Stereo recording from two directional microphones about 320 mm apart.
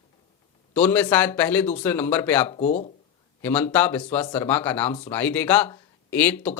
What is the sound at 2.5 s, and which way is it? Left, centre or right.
Speech, left.